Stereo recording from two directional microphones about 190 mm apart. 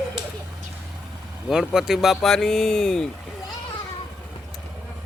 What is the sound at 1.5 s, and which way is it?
Speech, 5° right (ahead or behind).